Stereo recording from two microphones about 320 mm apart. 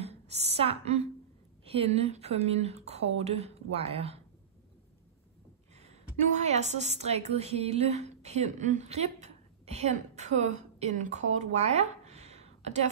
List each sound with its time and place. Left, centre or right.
0.0 s a sound: centre
1.7 s speech: centre
6.3 s a woman's voice: right